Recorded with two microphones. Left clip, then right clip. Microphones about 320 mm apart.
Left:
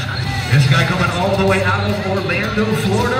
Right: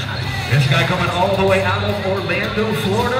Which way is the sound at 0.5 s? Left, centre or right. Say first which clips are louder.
Even; right.